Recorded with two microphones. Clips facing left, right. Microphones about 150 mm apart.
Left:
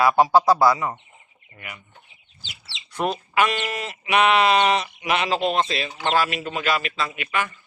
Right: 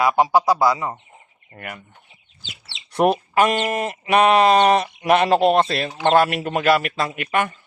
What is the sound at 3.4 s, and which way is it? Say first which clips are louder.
Speech: right 1 dB; 45° right (ahead or behind).